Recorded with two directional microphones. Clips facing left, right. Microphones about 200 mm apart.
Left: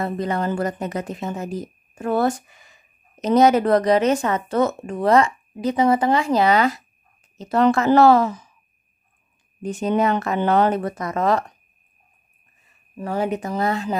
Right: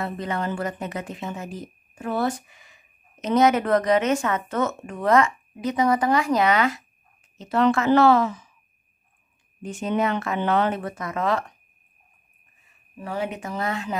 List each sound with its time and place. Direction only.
0.0 s speech: 40° left (ahead or behind)
9.6 s speech: 40° left (ahead or behind)
13.0 s speech: 40° left (ahead or behind)